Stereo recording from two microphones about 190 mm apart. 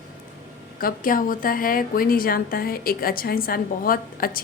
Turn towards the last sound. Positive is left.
turn(degrees=50)  # may be behind; listen again after turning